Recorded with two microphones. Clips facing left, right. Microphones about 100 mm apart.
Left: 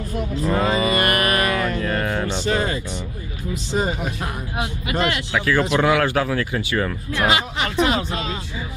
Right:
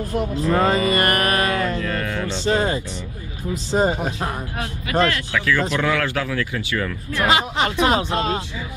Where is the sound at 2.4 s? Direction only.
30° right (ahead or behind).